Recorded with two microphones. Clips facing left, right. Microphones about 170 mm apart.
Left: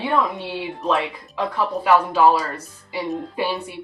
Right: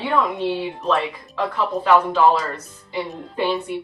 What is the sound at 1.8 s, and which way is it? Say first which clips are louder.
A woman's voice: even; 10° left (ahead or behind).